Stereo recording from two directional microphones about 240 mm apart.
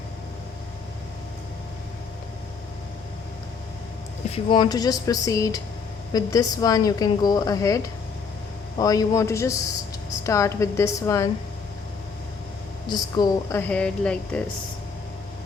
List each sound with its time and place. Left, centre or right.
4.3 s a woman's voice: left
8.8 s a woman's voice: centre
13.1 s speech: centre